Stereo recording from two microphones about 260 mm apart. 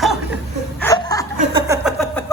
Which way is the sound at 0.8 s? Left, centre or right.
Centre.